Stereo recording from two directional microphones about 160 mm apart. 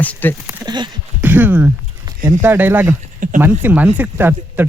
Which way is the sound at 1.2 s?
10° right (ahead or behind).